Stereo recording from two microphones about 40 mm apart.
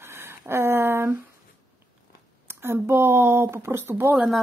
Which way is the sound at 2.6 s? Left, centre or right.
Right.